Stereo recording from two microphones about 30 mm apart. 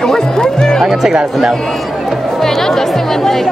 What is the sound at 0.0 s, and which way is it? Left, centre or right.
Speech, left.